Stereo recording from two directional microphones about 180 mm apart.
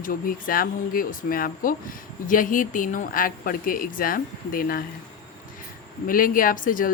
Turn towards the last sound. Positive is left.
turn(degrees=50)  # may be behind; listen again after turning